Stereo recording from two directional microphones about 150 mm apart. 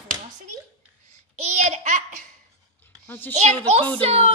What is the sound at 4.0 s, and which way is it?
Speech, 40° right (ahead or behind).